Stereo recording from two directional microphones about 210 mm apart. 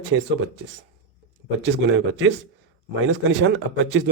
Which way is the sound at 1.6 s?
60° right (ahead or behind).